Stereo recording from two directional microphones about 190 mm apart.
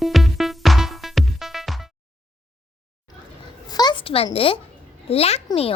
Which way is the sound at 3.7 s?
20° left (ahead or behind).